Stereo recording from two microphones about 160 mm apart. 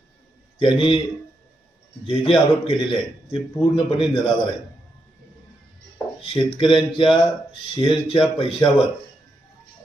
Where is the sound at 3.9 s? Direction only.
30° left (ahead or behind).